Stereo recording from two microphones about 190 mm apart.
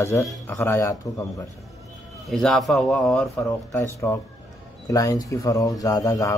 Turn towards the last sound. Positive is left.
turn(degrees=20)  # may be behind; listen again after turning